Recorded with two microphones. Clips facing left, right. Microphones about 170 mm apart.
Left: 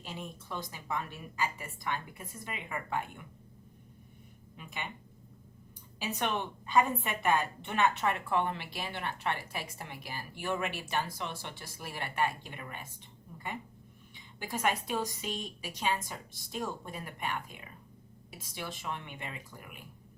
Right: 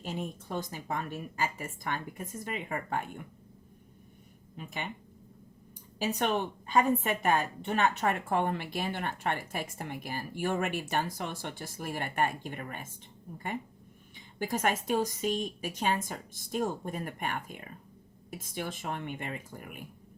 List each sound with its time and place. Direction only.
0.0 s a woman's voice: 45° right (ahead or behind)
4.5 s a woman's voice: 45° right (ahead or behind)
6.0 s a woman's voice: 45° right (ahead or behind)